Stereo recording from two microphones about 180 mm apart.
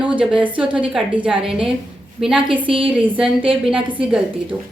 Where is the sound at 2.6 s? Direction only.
30° right (ahead or behind).